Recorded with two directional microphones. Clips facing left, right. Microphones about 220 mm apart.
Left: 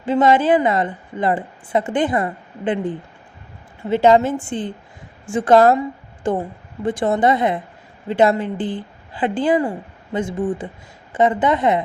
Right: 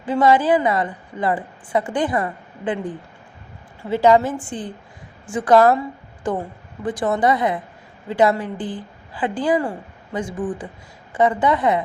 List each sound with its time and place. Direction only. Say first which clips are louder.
0.0 s a woman's voice: left 1 dB; 25° left (ahead or behind)